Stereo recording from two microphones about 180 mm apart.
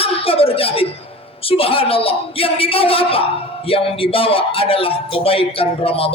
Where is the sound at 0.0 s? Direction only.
30° left (ahead or behind).